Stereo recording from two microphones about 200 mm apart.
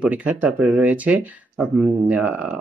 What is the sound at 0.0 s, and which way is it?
Speech, 5° right (ahead or behind).